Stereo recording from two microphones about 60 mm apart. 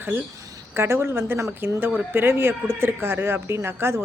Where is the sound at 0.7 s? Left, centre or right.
Right.